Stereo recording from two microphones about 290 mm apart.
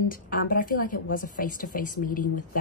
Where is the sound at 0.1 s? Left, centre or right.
Left.